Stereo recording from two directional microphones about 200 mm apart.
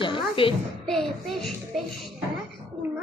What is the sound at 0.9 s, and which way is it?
A child's voice, centre (ahead or behind).